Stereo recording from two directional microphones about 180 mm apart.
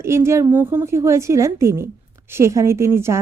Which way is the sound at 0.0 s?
15° right (ahead or behind).